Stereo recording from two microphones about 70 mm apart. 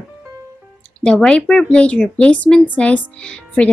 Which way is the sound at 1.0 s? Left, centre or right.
Centre.